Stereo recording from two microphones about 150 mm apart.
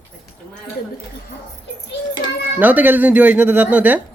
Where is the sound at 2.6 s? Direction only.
10° right (ahead or behind).